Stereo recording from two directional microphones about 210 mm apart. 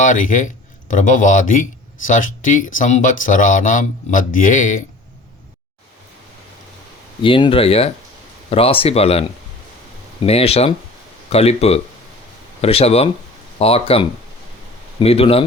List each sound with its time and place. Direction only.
0.0 s speech: 40° left (ahead or behind)
7.2 s speech: 25° left (ahead or behind)
10.2 s speech: 30° left (ahead or behind)